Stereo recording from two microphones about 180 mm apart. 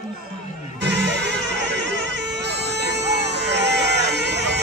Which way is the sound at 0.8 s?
70° right (ahead or behind).